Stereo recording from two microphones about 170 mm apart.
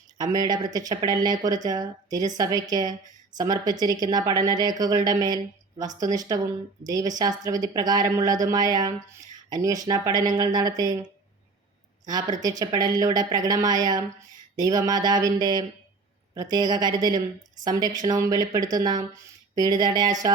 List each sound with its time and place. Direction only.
0.2 s a woman's voice: 25° right (ahead or behind)
12.0 s a woman's voice: 20° right (ahead or behind)